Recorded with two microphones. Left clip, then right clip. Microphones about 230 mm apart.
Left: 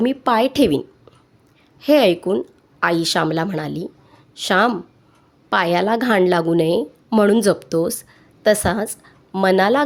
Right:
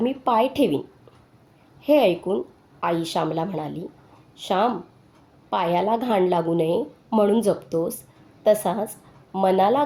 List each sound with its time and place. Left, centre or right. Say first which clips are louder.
0.0 s a woman's voice: left 3 dB; left
1.8 s a woman's voice: left 4 dB; left